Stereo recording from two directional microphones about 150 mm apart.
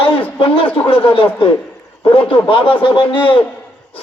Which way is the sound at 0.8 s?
35° left (ahead or behind).